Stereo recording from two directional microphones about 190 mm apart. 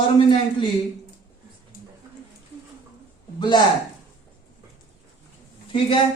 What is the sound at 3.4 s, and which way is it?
Speech, 25° left (ahead or behind).